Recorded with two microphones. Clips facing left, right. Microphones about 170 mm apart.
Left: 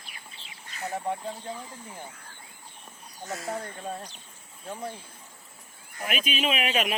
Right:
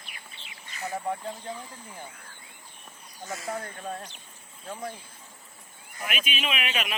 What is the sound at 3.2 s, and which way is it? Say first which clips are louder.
Speech: left 1 dB; 5° left (ahead or behind).